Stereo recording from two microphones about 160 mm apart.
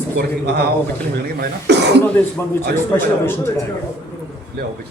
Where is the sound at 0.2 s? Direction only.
90° right.